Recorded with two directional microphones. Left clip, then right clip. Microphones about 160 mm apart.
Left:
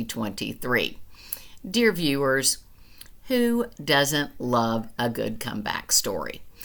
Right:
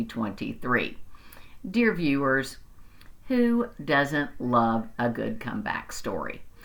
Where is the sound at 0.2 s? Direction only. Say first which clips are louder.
Even; 25° left (ahead or behind).